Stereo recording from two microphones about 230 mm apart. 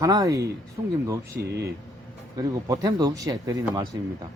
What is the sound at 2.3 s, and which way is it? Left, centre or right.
Speech, centre.